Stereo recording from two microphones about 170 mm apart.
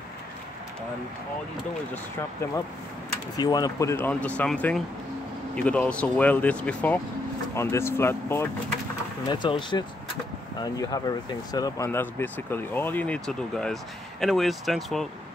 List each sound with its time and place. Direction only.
3.3 s speech: 20° left (ahead or behind)
9.3 s speech: 25° left (ahead or behind); by 15.0 s centre (ahead or behind)